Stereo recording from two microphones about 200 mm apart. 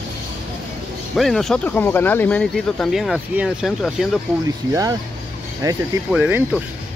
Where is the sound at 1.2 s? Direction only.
Centre (ahead or behind).